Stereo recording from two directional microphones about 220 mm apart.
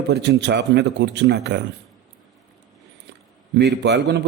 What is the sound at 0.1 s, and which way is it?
A man's voice, 50° right (ahead or behind).